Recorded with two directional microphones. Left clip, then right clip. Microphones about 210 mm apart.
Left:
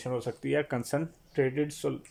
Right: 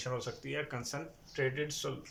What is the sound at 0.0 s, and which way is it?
Speech, 35° left (ahead or behind).